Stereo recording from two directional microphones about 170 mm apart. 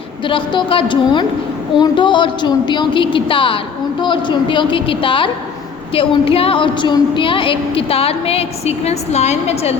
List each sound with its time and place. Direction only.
0.3 s a woman's voice: 30° left (ahead or behind)